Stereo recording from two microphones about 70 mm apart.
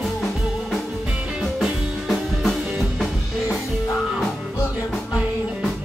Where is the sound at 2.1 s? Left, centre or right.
Centre.